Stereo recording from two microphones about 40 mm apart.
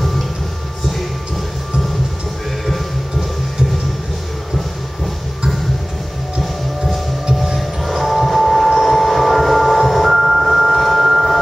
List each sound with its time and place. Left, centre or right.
2.6 s music: centre
7.2 s music: centre
7.8 s train: centre